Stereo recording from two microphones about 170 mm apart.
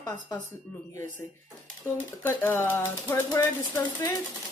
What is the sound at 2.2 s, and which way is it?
A woman's voice, 10° left (ahead or behind).